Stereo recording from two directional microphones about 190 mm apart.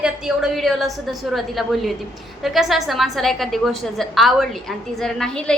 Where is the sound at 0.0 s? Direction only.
Centre (ahead or behind).